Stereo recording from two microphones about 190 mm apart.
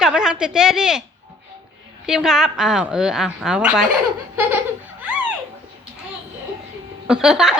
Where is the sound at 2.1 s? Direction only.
5° right (ahead or behind).